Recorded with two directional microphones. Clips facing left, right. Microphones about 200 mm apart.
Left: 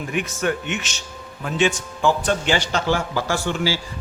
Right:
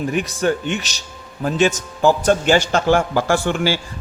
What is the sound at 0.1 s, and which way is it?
A man's voice, 35° right (ahead or behind).